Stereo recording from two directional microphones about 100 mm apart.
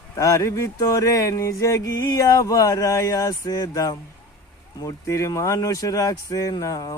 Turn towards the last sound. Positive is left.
turn(degrees=35)  # may be behind; listen again after turning